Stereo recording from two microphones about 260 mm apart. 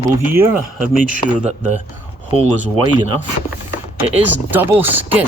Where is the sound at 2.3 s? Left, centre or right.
Right.